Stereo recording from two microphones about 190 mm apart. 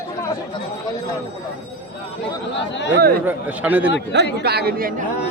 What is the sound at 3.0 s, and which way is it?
Speech, 55° right (ahead or behind).